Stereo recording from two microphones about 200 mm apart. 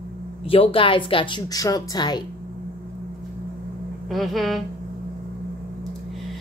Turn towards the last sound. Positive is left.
turn(degrees=0)  # may be behind; listen again after turning